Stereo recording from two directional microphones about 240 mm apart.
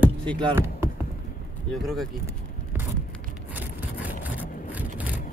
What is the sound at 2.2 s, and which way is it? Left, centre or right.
Vehicle, centre.